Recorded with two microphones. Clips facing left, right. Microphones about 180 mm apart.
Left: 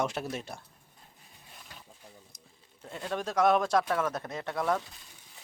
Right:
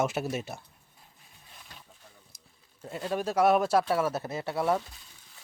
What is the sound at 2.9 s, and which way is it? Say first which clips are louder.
Speech: right 3 dB; 5° right (ahead or behind).